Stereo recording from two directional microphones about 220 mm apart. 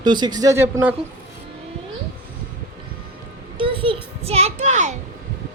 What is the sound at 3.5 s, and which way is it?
Child singing, 25° right (ahead or behind).